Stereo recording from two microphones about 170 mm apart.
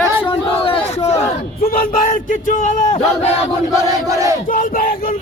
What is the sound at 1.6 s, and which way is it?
A man's voice, 60° left (ahead or behind).